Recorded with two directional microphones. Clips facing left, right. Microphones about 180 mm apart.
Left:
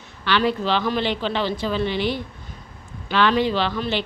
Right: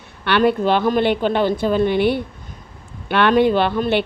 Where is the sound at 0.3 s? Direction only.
55° right (ahead or behind).